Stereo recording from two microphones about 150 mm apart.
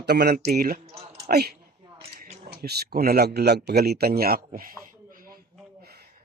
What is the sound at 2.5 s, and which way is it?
Speech, 90° right.